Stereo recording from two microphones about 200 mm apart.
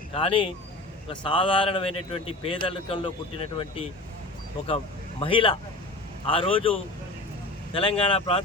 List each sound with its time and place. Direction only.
0.1 s a man's voice: 25° left (ahead or behind)
5.2 s a man's voice: 25° left (ahead or behind)